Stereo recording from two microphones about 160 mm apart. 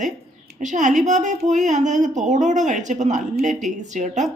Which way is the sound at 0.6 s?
50° right (ahead or behind).